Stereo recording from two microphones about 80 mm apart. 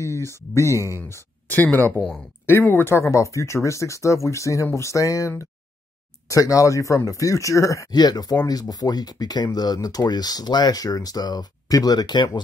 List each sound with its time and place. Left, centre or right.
0.0 s speech: left
2.0 s speech: centre
2.4 s speech: left
7.9 s speech: left